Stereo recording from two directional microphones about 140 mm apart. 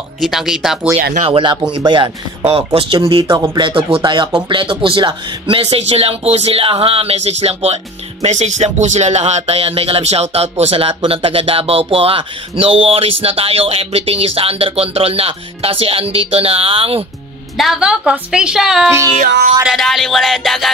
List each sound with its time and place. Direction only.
0.2 s a woman's voice: centre (ahead or behind)
1.2 s speech: 35° right (ahead or behind)
17.6 s a woman's voice: 5° right (ahead or behind)
19.1 s music: 75° right (ahead or behind)
19.6 s a woman's voice: centre (ahead or behind)